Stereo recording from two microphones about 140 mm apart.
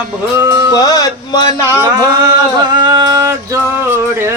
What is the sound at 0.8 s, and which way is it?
Music, 25° left (ahead or behind).